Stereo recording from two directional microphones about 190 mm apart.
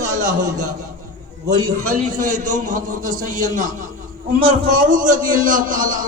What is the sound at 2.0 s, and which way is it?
A man's voice, 40° right (ahead or behind).